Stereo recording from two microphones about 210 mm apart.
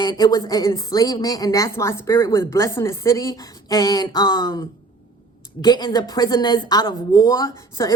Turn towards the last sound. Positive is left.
turn(degrees=15)  # may be behind; listen again after turning